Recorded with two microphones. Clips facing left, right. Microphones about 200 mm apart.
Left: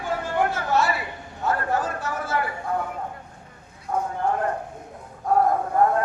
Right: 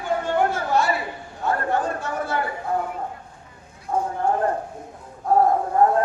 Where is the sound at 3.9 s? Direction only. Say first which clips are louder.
Right 2 dB; 30° right (ahead or behind).